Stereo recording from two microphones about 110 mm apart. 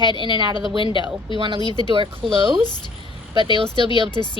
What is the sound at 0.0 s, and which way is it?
Speech, 45° left (ahead or behind).